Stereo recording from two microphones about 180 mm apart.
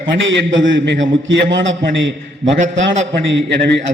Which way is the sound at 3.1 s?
70° right (ahead or behind).